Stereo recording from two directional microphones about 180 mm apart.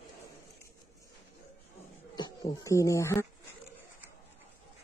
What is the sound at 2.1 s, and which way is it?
Speech, 20° left (ahead or behind).